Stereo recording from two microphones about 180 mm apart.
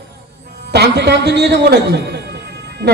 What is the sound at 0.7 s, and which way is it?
A man's voice, 65° right (ahead or behind).